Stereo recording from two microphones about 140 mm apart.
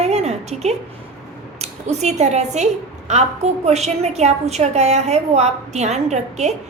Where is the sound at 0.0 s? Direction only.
50° right (ahead or behind).